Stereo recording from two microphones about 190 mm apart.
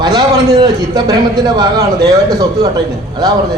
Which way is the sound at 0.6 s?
20° right (ahead or behind).